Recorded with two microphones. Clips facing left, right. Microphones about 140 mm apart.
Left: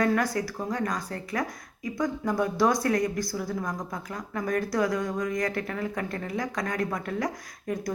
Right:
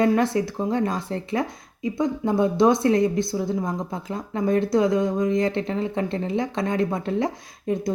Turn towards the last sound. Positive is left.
turn(degrees=-25)  # may be behind; listen again after turning